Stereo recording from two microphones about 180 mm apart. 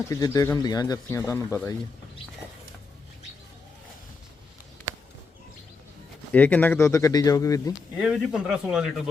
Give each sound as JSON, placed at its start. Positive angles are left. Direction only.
{"t": 0.0, "sound": "speech", "side_deg": 20}
{"t": 6.3, "sound": "speech", "side_deg": 10}
{"t": 7.8, "sound": "speech", "side_deg": -5}